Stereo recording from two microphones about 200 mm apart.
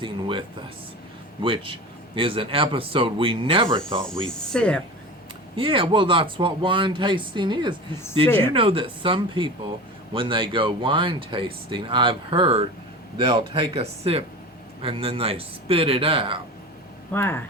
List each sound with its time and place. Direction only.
0.0 s a sound: 25° right (ahead or behind)
1.4 s speech: 25° right (ahead or behind)
4.0 s speech: 5° left (ahead or behind)
5.5 s speech: 25° right (ahead or behind)
17.1 s speech: 10° left (ahead or behind)